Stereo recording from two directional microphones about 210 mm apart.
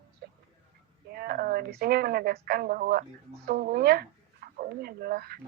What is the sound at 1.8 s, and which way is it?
Speech, 45° right (ahead or behind).